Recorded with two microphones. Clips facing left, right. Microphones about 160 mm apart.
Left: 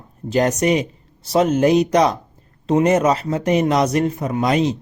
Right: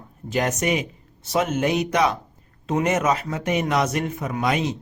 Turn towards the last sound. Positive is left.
turn(degrees=35)  # may be behind; listen again after turning